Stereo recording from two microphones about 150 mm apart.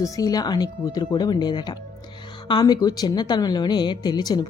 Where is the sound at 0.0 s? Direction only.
25° left (ahead or behind).